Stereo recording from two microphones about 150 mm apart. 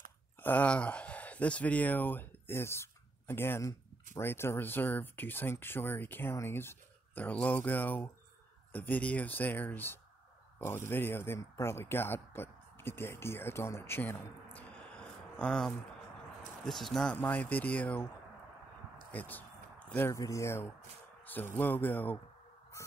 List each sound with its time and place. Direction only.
0.4 s speech: 10° left (ahead or behind)
19.1 s speech: 10° left (ahead or behind)